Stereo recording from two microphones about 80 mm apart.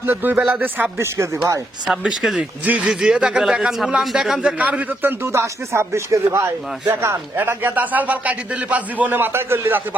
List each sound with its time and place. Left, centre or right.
0.0 s a man's voice: right
0.3 s a man's voice: centre
0.6 s speech: right
1.9 s a man's voice: centre
5.2 s speech: right
7.3 s a man's voice: right